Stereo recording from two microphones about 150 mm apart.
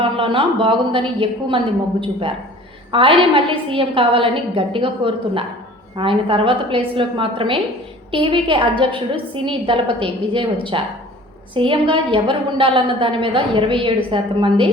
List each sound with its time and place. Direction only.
0.0 s a woman's voice: 35° right (ahead or behind)